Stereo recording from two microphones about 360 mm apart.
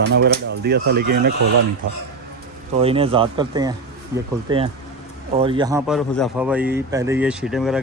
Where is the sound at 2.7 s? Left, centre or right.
Centre.